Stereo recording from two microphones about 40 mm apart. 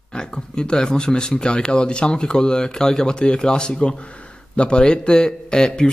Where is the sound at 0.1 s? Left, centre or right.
Left.